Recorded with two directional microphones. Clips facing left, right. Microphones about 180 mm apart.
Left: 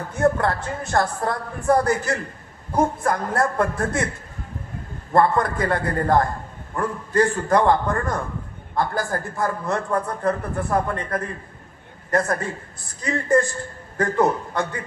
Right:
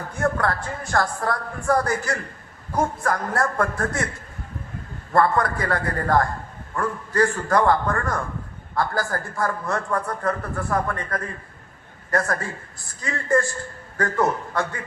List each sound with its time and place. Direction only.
0.2 s a man's voice: 20° left (ahead or behind)
5.1 s a man's voice: 20° left (ahead or behind)